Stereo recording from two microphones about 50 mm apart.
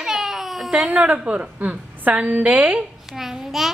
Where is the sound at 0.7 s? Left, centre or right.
Right.